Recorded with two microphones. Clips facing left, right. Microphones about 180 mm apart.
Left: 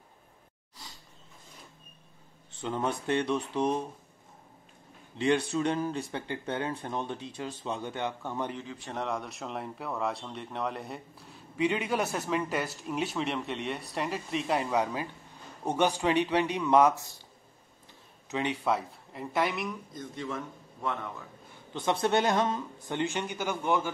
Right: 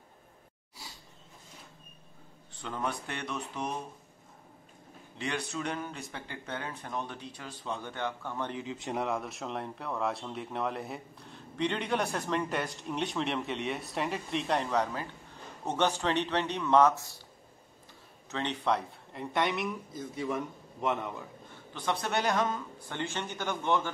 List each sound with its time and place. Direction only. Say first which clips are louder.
2.6 s speech: left 4 dB; 25° left (ahead or behind)
5.2 s speech: left 8 dB; 30° left (ahead or behind)
8.6 s a man's voice: right 4 dB; 20° right (ahead or behind)
8.9 s speech: right 1 dB; 5° right (ahead or behind); by 17.1 s 15° left (ahead or behind)
18.3 s speech: left 2 dB; 10° left (ahead or behind); by 21.3 s 15° right (ahead or behind)
21.7 s speech: left 5 dB; 25° left (ahead or behind)